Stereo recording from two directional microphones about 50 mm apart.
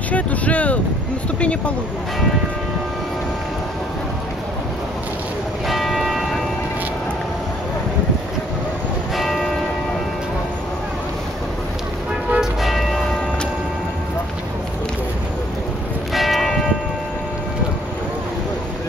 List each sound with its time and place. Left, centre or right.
0.1 s vehicle: left
5.7 s church bell: centre
9.1 s church bell: centre
12.4 s church bell: centre
16.1 s church bell: centre